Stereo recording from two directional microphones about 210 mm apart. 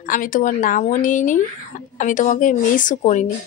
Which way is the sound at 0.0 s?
40° left (ahead or behind).